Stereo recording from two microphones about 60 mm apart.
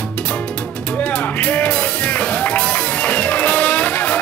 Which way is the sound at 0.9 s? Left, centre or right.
Left.